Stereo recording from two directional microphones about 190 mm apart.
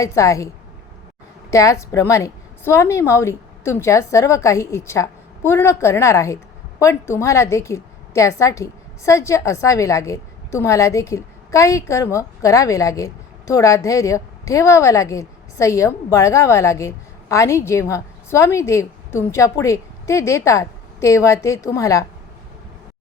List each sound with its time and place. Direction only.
0.0 s a woman's voice: 15° left (ahead or behind)
1.5 s a woman's voice: 15° left (ahead or behind)